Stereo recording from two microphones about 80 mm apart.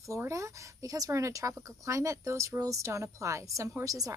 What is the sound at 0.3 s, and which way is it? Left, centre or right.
A woman's voice, right.